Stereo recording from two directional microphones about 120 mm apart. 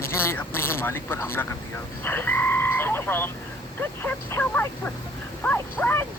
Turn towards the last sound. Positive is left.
turn(degrees=15)  # may be behind; listen again after turning